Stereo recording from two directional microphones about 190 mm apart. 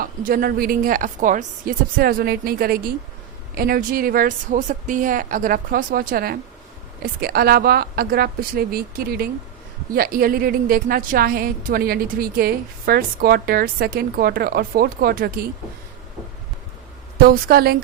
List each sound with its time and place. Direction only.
0.0 s a woman's voice: 50° right (ahead or behind)
17.2 s a woman's voice: 50° right (ahead or behind)